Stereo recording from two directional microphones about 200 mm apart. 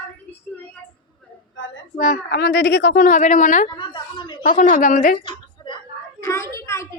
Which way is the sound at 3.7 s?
20° left (ahead or behind).